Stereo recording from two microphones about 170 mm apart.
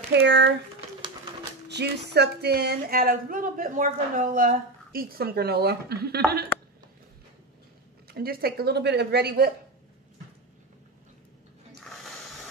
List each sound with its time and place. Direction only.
0.1 s speech: 90° right
1.7 s speech: 80° right
8.1 s speech: 65° right (ahead or behind)